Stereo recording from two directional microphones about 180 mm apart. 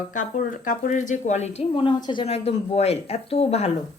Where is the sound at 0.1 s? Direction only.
45° left (ahead or behind).